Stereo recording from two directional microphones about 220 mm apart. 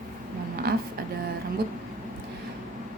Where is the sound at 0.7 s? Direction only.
45° right (ahead or behind).